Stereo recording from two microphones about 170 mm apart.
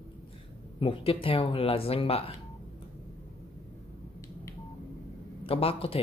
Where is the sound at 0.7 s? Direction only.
30° left (ahead or behind).